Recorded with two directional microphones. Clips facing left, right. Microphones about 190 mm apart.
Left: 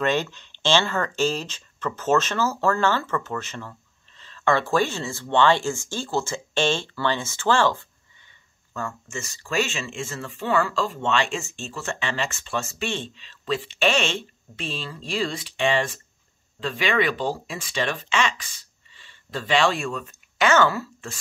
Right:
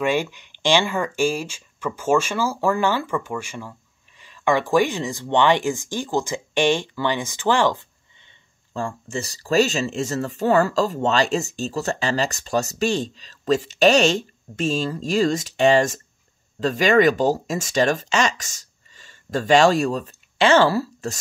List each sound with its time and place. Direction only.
0.0 s speech: 10° right (ahead or behind)
8.7 s speech: 30° right (ahead or behind)